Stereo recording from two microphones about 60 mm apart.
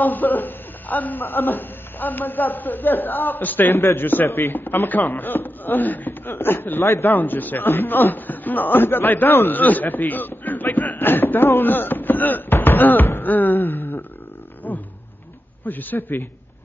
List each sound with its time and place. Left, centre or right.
0.0 s speech: left
6.8 s a man's voice: left
7.1 s speech: left
14.6 s roaring cats: left
15.6 s speech: left